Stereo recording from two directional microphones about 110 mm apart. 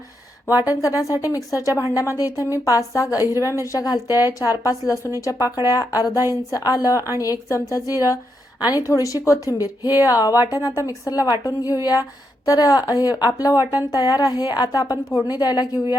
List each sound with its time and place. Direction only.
0.6 s a woman's voice: 30° left (ahead or behind)